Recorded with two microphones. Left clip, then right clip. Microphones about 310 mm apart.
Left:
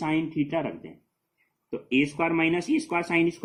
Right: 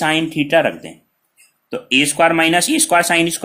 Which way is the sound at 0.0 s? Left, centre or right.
Right.